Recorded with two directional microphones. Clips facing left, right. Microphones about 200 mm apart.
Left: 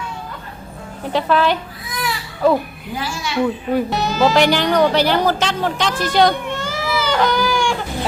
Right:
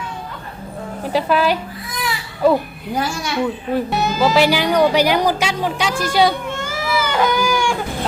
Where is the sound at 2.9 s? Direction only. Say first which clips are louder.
Right 4 dB; 50° right (ahead or behind).